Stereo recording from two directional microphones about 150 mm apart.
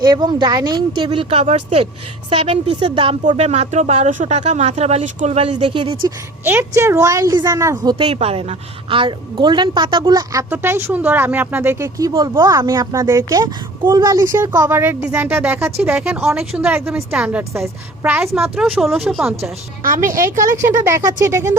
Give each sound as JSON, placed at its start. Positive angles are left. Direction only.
{"t": 0.0, "sound": "a woman's voice", "side_deg": -30}
{"t": 5.6, "sound": "a woman's voice", "side_deg": -35}
{"t": 6.4, "sound": "a woman's voice", "side_deg": -15}
{"t": 7.9, "sound": "a woman's voice", "side_deg": -40}
{"t": 10.5, "sound": "a woman's voice", "side_deg": -15}
{"t": 19.8, "sound": "a woman's voice", "side_deg": -65}
{"t": 20.6, "sound": "a woman's voice", "side_deg": -20}